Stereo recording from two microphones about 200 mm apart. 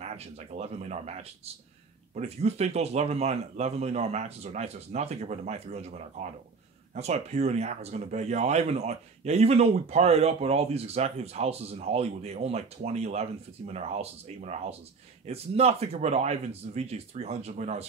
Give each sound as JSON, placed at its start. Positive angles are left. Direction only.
{"t": 0.0, "sound": "speech", "side_deg": -35}